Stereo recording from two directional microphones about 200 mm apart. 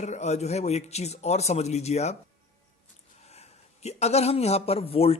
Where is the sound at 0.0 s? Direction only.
35° left (ahead or behind).